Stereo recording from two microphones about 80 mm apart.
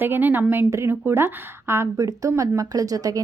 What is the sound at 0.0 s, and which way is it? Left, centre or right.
A woman's voice, right.